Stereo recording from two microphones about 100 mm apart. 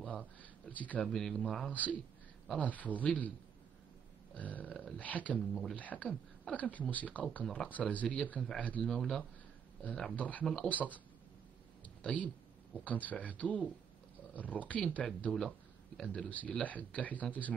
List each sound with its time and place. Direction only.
0.0 s a sound: 15° left (ahead or behind)
1.0 s speech: 5° left (ahead or behind)
4.4 s speech: 15° left (ahead or behind)
5.5 s speech: centre (ahead or behind)
5.8 s speech: 15° left (ahead or behind)
8.8 s speech: 5° left (ahead or behind)
12.0 s speech: 15° left (ahead or behind)